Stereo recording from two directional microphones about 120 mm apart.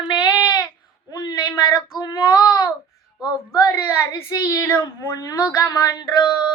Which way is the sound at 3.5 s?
30° left (ahead or behind).